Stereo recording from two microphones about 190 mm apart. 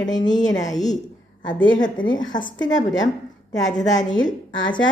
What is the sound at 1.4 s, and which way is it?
Speech, 25° left (ahead or behind).